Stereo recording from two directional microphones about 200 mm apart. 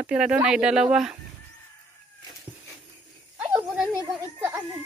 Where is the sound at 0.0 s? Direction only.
5° right (ahead or behind).